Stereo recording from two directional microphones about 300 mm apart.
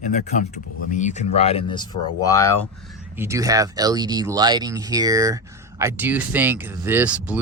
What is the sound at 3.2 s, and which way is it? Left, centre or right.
Speech, centre.